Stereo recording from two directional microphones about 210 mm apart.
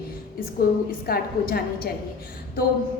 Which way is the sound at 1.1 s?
45° left (ahead or behind).